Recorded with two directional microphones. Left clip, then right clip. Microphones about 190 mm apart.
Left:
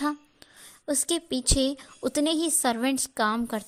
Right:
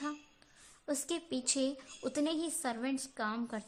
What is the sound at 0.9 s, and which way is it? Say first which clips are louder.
A woman's voice: left 9 dB; 25° left (ahead or behind).